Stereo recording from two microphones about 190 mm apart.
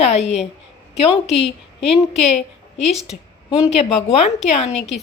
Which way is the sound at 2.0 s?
35° left (ahead or behind).